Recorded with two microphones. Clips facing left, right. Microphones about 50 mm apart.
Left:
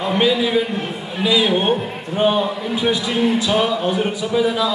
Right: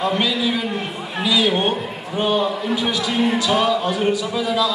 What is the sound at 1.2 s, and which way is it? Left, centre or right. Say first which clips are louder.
A man's voice: left 2 dB; left.